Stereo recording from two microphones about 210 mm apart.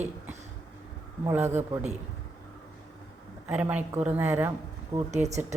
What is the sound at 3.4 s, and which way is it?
A woman's voice, 5° right (ahead or behind).